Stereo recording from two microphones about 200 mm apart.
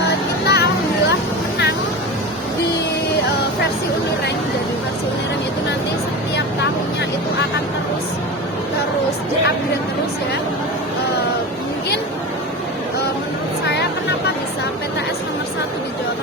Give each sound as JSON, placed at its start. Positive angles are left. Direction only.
{"t": 0.4, "sound": "music", "side_deg": 55}